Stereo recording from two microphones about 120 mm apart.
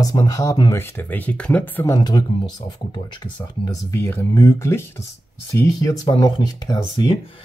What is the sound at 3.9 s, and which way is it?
Speech, 25° left (ahead or behind).